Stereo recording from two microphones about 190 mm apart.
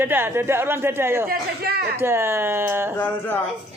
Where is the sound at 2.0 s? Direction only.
15° right (ahead or behind).